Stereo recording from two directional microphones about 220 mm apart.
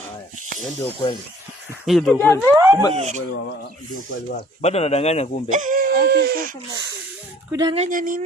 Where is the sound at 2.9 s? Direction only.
30° right (ahead or behind).